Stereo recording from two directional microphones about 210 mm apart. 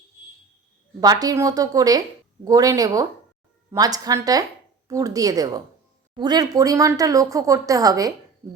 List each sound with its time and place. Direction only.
1.0 s a woman's voice: 20° right (ahead or behind)